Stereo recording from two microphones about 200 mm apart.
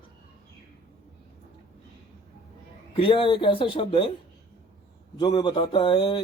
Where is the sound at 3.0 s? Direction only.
25° left (ahead or behind).